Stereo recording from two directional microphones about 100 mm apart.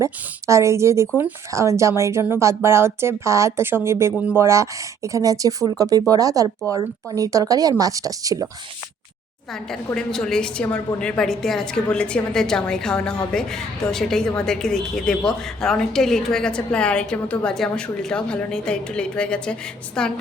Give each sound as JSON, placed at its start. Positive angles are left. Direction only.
{"t": 0.0, "sound": "speech", "side_deg": -30}
{"t": 9.6, "sound": "a woman's voice", "side_deg": 5}